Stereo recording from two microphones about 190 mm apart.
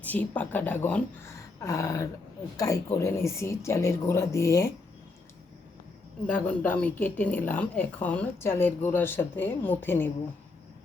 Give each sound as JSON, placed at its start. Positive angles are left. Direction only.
{"t": 0.0, "sound": "speech", "side_deg": 10}
{"t": 6.2, "sound": "speech", "side_deg": 10}